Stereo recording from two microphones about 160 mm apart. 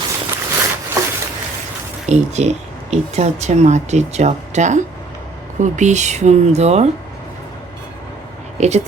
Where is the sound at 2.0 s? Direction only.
45° right (ahead or behind).